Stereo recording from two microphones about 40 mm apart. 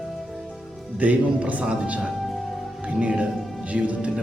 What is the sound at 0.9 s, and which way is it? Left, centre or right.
Speech, right.